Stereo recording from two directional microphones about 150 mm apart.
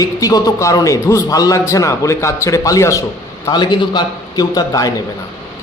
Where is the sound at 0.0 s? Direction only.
25° left (ahead or behind).